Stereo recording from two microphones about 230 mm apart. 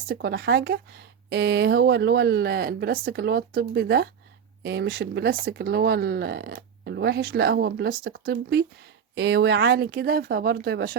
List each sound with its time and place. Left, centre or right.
0.1 s speech: right